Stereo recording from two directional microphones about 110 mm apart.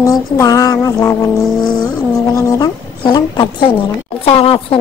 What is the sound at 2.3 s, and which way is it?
Speech, 30° left (ahead or behind).